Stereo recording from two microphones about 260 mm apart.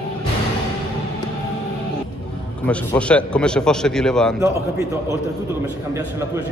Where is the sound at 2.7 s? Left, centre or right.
Centre.